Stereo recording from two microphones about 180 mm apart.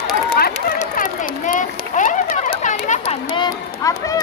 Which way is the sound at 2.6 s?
45° left (ahead or behind).